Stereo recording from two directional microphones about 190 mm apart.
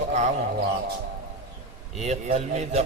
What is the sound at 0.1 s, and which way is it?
Bird, 35° right (ahead or behind).